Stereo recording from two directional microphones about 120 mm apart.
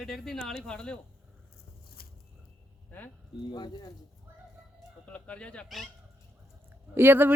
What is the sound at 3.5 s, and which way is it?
Speech, 35° left (ahead or behind).